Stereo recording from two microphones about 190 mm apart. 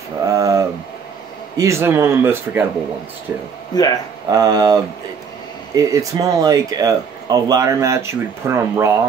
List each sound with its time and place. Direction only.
0.3 s a sound: 15° right (ahead or behind)
1.6 s speech: 15° right (ahead or behind)
3.7 s speech: 20° left (ahead or behind)
4.3 s speech: 20° right (ahead or behind)
5.8 s speech: 15° right (ahead or behind)